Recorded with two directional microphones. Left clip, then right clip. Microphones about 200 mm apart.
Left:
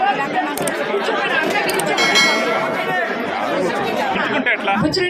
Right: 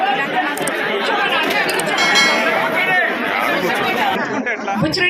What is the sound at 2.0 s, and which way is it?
Bell, centre (ahead or behind).